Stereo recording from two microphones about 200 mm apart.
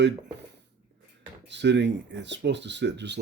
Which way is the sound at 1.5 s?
60° right (ahead or behind).